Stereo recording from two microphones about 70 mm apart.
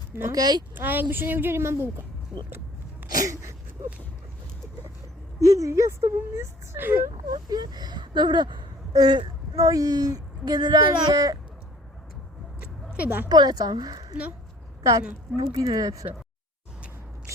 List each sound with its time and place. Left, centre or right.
0.1 s speech: right
0.3 s speech: right
0.8 s a woman's voice: right
5.4 s speech: right
6.7 s speech: right
7.3 s speech: right
9.6 s speech: right
12.9 s speech: right
13.2 s speech: right
15.5 s speech: right